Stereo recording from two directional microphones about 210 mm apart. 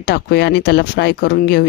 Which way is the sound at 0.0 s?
50° left (ahead or behind).